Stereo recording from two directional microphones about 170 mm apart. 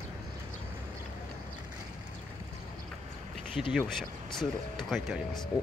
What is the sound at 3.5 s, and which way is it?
Speech, centre (ahead or behind).